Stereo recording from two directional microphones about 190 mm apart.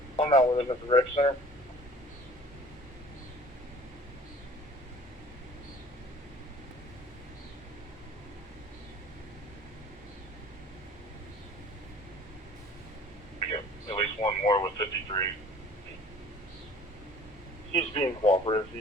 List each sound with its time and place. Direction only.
0.2 s a man's voice: 35° left (ahead or behind)
13.5 s radio: 30° left (ahead or behind)
17.7 s radio: 30° left (ahead or behind)